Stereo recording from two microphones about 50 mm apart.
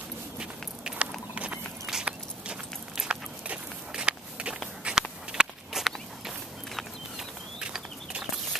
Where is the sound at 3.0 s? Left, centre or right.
Centre.